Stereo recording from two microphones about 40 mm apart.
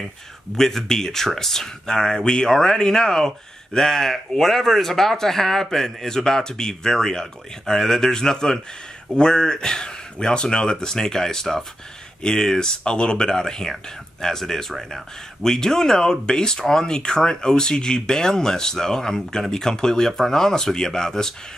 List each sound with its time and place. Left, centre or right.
0.6 s speech: centre